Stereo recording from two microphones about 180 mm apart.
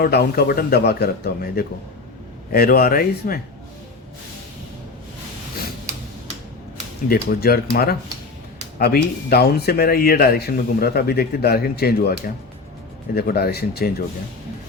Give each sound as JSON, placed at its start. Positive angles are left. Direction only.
{"t": 0.0, "sound": "speech", "side_deg": 60}
{"t": 7.1, "sound": "speech", "side_deg": 60}